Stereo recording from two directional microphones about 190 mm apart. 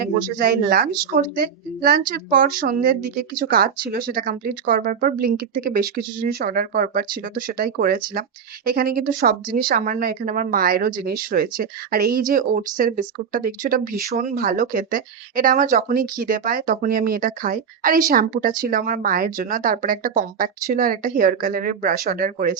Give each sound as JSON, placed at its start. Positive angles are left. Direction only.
{"t": 0.0, "sound": "speech", "side_deg": -50}